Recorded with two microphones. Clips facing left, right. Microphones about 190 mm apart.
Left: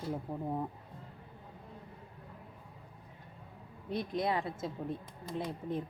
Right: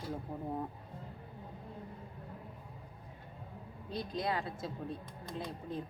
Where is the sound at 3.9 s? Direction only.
25° left (ahead or behind).